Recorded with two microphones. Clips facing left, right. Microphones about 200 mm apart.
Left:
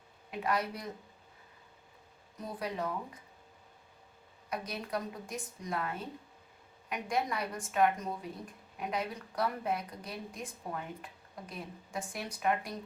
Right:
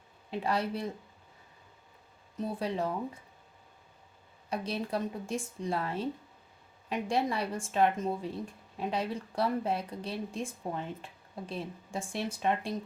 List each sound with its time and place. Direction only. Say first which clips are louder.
0.3 s speech: right 2 dB; 30° right (ahead or behind)
2.4 s speech: right 5 dB; 30° right (ahead or behind)
4.4 s speech: right 5 dB; 30° right (ahead or behind)